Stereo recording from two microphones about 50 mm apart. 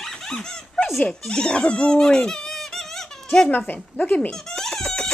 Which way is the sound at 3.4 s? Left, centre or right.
Left.